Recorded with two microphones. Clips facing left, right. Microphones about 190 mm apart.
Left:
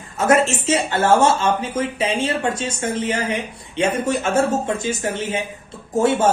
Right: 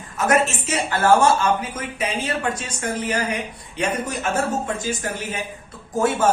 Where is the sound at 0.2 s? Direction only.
30° left (ahead or behind).